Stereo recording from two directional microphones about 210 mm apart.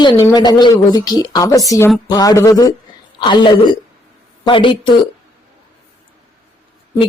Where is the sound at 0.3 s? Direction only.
20° left (ahead or behind).